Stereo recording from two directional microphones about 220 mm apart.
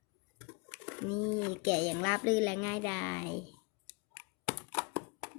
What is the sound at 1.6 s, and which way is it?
Speech, 10° left (ahead or behind).